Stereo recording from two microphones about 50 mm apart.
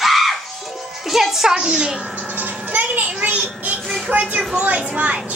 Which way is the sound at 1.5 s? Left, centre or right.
Centre.